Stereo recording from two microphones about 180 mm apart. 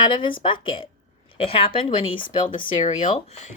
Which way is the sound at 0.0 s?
25° left (ahead or behind).